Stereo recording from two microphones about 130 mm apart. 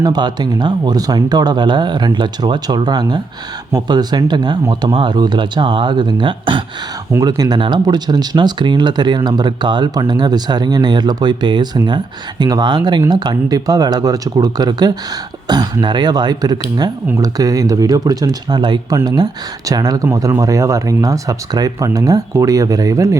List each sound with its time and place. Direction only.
0.0 s speech: 35° right (ahead or behind)
7.1 s speech: 30° right (ahead or behind)